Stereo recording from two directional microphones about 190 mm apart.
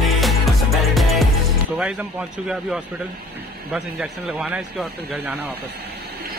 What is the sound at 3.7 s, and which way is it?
Speech, 5° right (ahead or behind).